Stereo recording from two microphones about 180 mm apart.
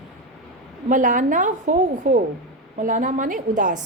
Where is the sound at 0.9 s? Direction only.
45° right (ahead or behind).